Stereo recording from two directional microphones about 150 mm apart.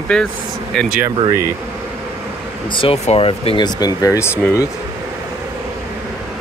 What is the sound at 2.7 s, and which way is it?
Speech, 40° left (ahead or behind).